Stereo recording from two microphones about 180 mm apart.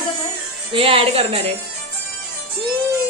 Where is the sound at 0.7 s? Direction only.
30° right (ahead or behind).